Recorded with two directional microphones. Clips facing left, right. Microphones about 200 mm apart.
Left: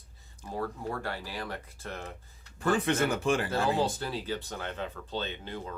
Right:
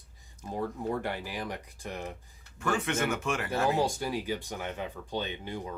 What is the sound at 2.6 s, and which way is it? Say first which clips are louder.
Speech: left 3 dB; 35° left (ahead or behind).